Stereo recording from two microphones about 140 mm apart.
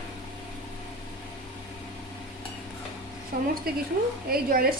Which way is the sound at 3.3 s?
90° right.